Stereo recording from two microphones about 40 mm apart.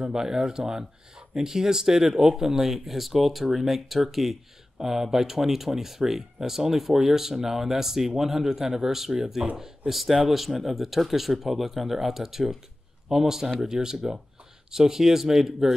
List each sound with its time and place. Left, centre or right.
0.0 s speech: centre